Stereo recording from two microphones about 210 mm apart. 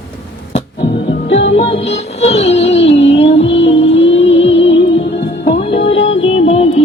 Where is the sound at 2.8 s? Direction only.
60° left (ahead or behind).